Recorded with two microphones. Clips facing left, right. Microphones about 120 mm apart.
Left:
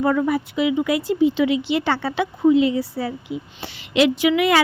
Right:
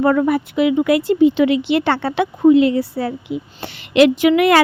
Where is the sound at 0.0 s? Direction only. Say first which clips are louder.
Right 4 dB; 55° right (ahead or behind).